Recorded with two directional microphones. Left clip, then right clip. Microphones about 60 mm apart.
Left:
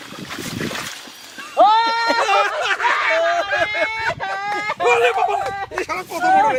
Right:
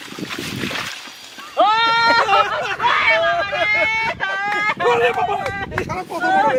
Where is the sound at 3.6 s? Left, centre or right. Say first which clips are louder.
Right 3 dB; right.